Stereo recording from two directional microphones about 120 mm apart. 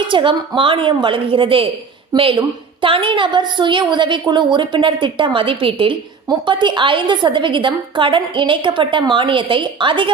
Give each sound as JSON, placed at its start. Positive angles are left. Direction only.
{"t": 0.1, "sound": "a woman's voice", "side_deg": -45}